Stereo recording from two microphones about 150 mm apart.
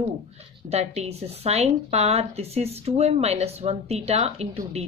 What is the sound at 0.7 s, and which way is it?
Speech, 45° right (ahead or behind).